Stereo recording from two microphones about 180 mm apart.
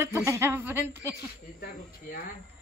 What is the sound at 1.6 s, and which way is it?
Speech, 55° left (ahead or behind).